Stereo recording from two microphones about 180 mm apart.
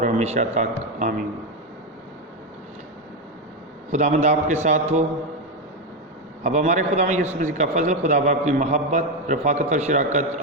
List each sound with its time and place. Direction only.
0.0 s a man's voice: 40° right (ahead or behind)
3.9 s a man's voice: 45° right (ahead or behind)
6.4 s a man's voice: 45° right (ahead or behind)